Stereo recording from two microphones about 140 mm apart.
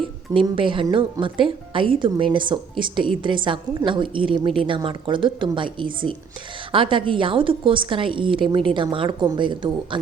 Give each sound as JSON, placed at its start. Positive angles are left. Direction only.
{"t": 0.3, "sound": "a woman's voice", "side_deg": -35}